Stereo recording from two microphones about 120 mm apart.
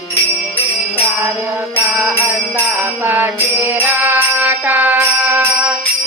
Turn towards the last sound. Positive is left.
turn(degrees=-15)  # may be behind; listen again after turning